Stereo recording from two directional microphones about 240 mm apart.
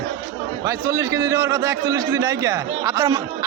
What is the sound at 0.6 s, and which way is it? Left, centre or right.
A man's voice, centre.